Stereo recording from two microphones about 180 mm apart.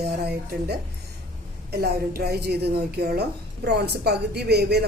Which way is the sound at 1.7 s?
60° right (ahead or behind).